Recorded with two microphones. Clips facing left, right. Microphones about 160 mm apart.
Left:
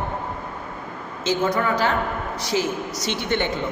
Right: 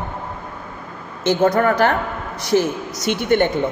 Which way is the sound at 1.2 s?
55° right (ahead or behind).